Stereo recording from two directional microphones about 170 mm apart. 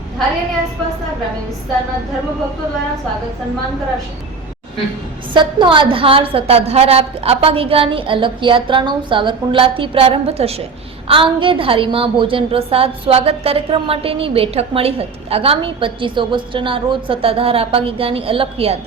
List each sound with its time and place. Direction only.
5.3 s a woman's voice: 30° right (ahead or behind)